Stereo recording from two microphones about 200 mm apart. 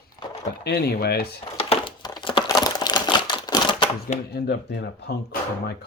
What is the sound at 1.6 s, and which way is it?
Crumpling, 25° left (ahead or behind).